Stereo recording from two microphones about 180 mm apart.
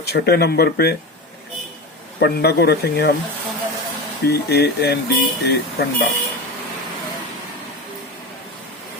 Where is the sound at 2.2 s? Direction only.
65° left (ahead or behind).